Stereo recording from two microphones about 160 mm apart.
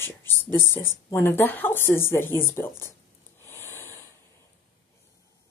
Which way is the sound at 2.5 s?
15° left (ahead or behind).